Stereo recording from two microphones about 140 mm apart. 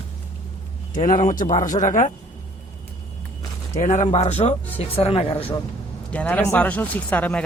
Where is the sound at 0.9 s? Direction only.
65° left (ahead or behind).